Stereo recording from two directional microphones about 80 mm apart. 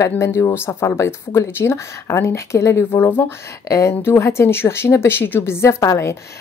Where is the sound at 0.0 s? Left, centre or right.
Left.